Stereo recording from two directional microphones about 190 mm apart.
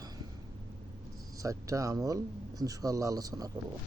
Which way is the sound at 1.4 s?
15° right (ahead or behind).